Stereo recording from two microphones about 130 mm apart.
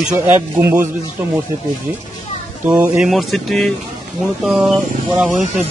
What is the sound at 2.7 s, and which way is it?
Speech, 10° right (ahead or behind).